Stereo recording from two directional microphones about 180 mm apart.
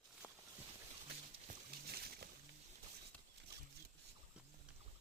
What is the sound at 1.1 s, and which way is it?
Music, 60° right (ahead or behind).